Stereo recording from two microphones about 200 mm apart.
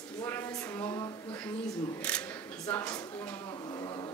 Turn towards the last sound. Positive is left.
turn(degrees=20)  # may be behind; listen again after turning